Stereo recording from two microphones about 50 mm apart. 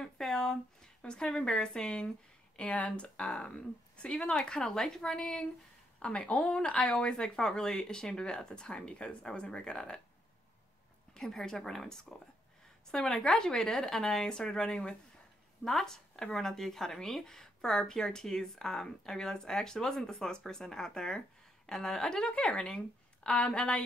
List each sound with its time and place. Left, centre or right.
0.0 s speech: centre
2.5 s speech: left
11.1 s speech: centre